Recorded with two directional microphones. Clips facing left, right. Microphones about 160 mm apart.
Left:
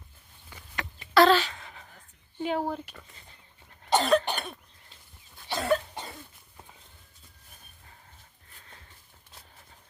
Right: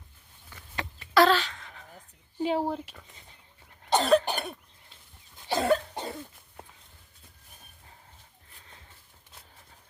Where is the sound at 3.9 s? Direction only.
Centre (ahead or behind).